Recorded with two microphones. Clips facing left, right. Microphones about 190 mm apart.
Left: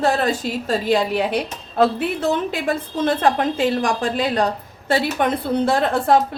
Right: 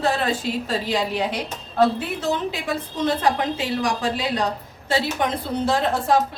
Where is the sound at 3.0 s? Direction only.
50° left (ahead or behind).